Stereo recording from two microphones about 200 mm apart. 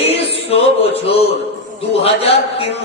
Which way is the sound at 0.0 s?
30° left (ahead or behind).